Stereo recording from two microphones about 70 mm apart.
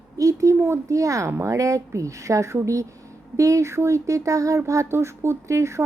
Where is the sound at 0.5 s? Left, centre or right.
Right.